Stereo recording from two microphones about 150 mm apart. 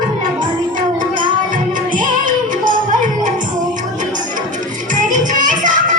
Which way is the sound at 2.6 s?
60° right (ahead or behind).